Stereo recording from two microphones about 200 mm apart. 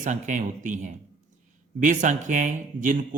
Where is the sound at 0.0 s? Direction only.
40° right (ahead or behind).